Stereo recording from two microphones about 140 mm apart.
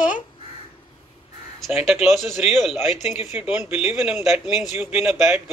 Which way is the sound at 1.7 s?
50° left (ahead or behind).